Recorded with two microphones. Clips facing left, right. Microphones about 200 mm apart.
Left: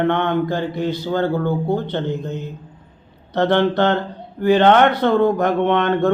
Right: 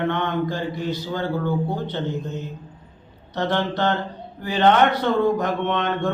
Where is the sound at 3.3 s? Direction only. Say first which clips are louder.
Left 7 dB; 60° left (ahead or behind).